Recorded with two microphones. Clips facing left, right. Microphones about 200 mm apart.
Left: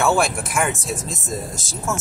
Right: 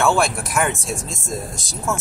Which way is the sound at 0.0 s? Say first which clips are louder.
Even; centre (ahead or behind).